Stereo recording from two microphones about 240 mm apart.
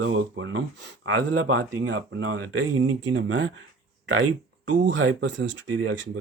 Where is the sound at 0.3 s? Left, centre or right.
Right.